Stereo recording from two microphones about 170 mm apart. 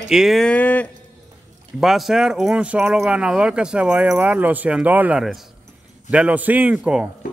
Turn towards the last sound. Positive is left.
turn(degrees=-5)  # may be behind; listen again after turning